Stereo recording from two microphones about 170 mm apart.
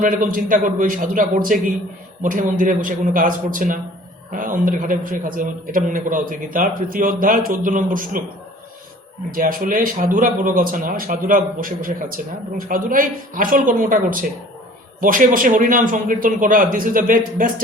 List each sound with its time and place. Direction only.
0.0 s speech: 55° right (ahead or behind)
9.3 s speech: 55° right (ahead or behind)